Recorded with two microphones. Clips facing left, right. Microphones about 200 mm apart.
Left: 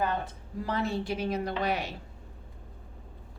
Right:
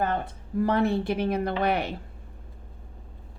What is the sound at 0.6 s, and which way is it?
A woman's voice, 55° right (ahead or behind).